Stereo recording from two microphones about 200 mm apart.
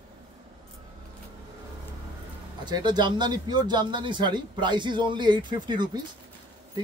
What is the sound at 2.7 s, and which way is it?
Speech, 20° right (ahead or behind).